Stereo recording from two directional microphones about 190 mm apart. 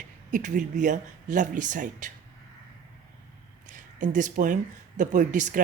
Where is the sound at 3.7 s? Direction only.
40° right (ahead or behind).